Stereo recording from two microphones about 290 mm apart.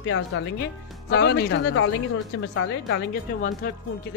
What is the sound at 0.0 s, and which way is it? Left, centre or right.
A woman's voice, left.